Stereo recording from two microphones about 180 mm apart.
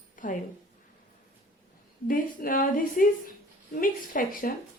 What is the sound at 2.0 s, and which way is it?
A woman's voice, 50° left (ahead or behind).